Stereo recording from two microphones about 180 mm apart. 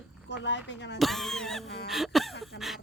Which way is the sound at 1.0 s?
Centre (ahead or behind).